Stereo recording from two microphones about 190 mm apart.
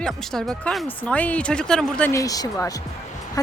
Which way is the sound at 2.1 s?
20° left (ahead or behind).